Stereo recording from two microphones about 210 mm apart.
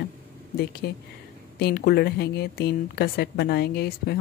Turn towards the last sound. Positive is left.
turn(degrees=50)  # may be behind; listen again after turning